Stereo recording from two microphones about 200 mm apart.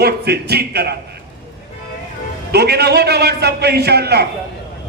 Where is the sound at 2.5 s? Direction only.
55° right (ahead or behind).